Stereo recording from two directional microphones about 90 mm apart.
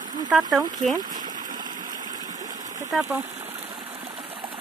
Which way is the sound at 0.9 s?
50° right (ahead or behind).